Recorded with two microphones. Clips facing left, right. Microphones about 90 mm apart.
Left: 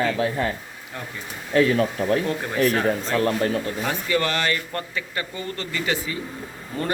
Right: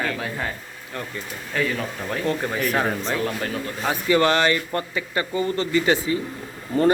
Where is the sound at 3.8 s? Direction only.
20° right (ahead or behind).